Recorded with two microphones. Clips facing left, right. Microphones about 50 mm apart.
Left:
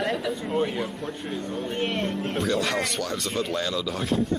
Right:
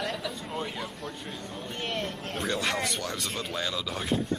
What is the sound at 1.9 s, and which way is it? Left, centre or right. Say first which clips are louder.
Speech: left 5 dB; centre.